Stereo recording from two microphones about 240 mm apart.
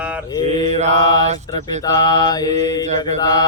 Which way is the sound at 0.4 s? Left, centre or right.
Right.